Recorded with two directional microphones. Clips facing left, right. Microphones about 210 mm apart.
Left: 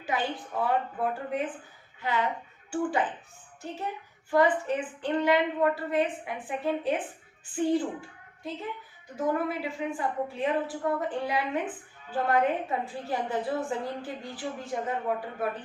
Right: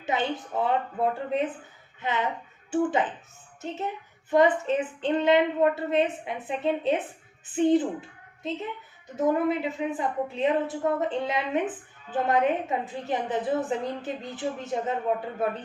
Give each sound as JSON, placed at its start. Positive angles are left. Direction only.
{"t": 0.0, "sound": "a woman's voice", "side_deg": -25}
{"t": 4.3, "sound": "a woman's voice", "side_deg": -20}
{"t": 9.1, "sound": "a woman's voice", "side_deg": -20}